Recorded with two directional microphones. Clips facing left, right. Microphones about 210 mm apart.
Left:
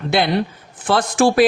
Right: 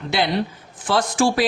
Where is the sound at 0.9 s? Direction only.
55° left (ahead or behind).